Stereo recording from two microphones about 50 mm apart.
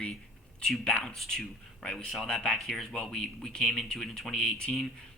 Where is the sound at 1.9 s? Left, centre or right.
Centre.